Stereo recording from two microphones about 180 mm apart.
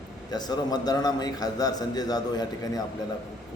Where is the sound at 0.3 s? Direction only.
20° left (ahead or behind).